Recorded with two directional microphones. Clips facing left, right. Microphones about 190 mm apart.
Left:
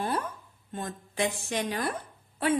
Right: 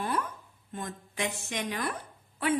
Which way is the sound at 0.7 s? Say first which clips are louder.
Left 4 dB; 35° left (ahead or behind).